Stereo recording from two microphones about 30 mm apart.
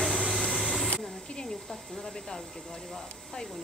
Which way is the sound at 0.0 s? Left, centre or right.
Centre.